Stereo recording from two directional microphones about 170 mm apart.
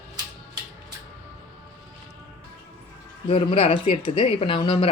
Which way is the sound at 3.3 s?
35° left (ahead or behind).